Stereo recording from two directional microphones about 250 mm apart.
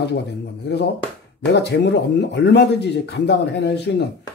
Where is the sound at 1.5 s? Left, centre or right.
Left.